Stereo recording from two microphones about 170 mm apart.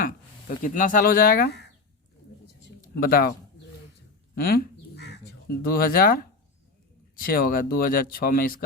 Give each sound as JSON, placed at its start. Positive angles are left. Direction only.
{"t": 0.0, "sound": "speech", "side_deg": 50}
{"t": 2.6, "sound": "a sound", "side_deg": 65}
{"t": 4.4, "sound": "bird", "side_deg": 65}
{"t": 7.2, "sound": "speech", "side_deg": 60}